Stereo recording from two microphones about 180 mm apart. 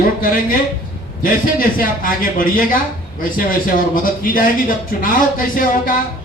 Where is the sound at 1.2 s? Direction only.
50° left (ahead or behind).